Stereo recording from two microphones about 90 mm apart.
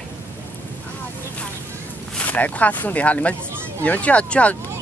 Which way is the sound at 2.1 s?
15° left (ahead or behind).